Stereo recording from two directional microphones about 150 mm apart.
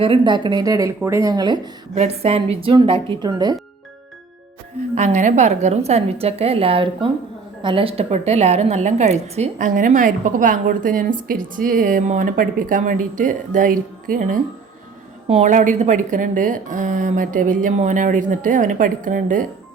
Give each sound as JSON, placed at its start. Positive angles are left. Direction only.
{"t": 0.0, "sound": "speech", "side_deg": -35}
{"t": 2.0, "sound": "speech", "side_deg": -45}
{"t": 4.9, "sound": "a woman's voice", "side_deg": -50}
{"t": 15.3, "sound": "a woman's voice", "side_deg": -50}